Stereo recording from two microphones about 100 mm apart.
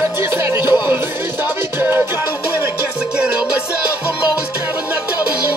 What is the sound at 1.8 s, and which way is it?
Music, 25° right (ahead or behind).